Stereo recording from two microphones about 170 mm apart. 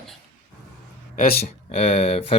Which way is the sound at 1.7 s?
40° left (ahead or behind).